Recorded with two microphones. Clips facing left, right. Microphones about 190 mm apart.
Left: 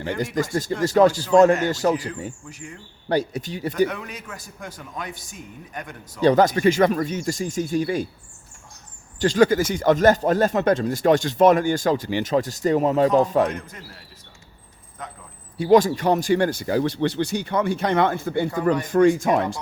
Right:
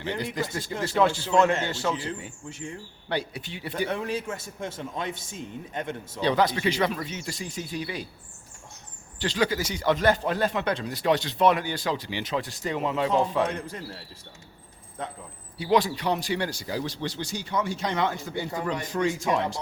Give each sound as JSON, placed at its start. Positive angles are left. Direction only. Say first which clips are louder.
{"t": 0.4, "sound": "a man's voice", "louder": "left 7 dB", "side_deg": 45}
{"t": 3.8, "sound": "a man's voice", "louder": "right 3 dB", "side_deg": -30}
{"t": 6.2, "sound": "speech", "louder": "left 7 dB", "side_deg": 45}
{"t": 9.1, "sound": "speech", "louder": "left 9 dB", "side_deg": 45}
{"t": 13.5, "sound": "a man's voice", "louder": "even", "side_deg": -30}
{"t": 15.5, "sound": "speech", "louder": "left 7 dB", "side_deg": 45}